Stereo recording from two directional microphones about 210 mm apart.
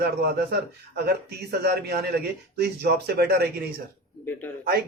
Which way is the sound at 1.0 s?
50° right (ahead or behind).